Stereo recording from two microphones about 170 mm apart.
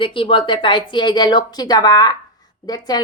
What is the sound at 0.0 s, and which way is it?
Speech, 30° left (ahead or behind).